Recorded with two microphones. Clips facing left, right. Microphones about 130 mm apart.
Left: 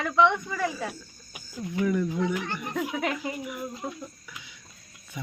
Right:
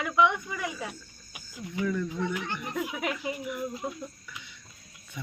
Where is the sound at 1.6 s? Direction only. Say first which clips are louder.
Left 4 dB; 15° left (ahead or behind).